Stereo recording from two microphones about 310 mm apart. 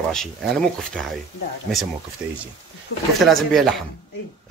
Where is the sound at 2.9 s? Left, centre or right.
Left.